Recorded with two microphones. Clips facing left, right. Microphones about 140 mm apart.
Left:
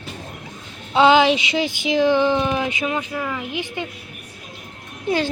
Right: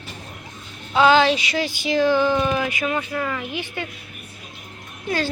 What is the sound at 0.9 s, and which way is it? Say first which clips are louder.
Speech: left 2 dB; 20° left (ahead or behind).